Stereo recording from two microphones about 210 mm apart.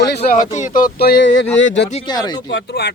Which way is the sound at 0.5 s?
40° left (ahead or behind).